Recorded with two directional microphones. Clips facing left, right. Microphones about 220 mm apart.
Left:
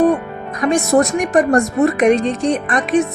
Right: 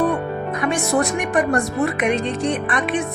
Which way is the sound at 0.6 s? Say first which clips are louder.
Left 7 dB; 40° left (ahead or behind).